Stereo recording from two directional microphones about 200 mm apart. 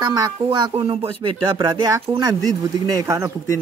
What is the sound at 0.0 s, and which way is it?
Speech, 20° right (ahead or behind).